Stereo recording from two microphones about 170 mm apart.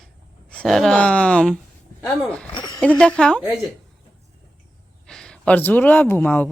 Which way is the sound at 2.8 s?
10° left (ahead or behind).